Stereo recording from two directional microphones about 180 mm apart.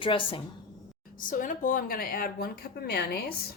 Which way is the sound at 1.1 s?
50° left (ahead or behind).